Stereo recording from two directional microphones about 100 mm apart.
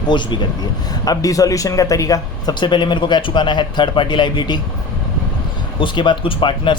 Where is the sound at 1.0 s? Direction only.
40° left (ahead or behind).